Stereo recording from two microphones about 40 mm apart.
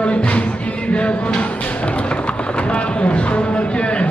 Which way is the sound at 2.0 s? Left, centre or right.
Left.